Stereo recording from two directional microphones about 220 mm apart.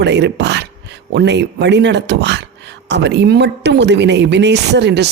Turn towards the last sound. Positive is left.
turn(degrees=-50)  # may be behind; listen again after turning